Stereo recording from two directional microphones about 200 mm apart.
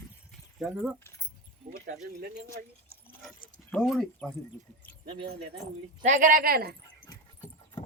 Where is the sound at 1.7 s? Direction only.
50° right (ahead or behind).